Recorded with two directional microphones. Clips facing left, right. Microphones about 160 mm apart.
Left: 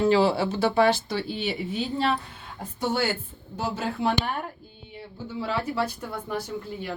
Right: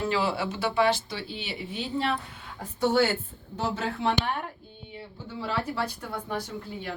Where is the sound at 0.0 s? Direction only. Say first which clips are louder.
Left 7 dB; 30° left (ahead or behind); by 1.8 s 50° left (ahead or behind).